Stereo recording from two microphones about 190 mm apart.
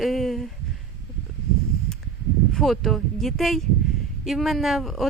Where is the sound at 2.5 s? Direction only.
Centre (ahead or behind).